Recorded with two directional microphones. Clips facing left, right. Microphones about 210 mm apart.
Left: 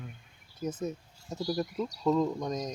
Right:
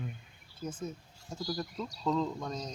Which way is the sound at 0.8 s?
25° left (ahead or behind).